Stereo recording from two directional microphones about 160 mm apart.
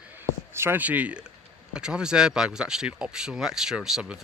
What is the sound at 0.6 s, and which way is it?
Speech, 15° right (ahead or behind).